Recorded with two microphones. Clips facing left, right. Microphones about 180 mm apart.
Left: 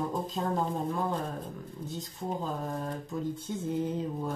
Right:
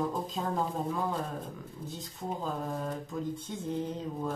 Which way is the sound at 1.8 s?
Centre (ahead or behind).